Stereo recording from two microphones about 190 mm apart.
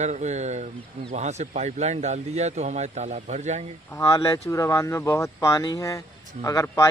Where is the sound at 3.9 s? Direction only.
15° left (ahead or behind).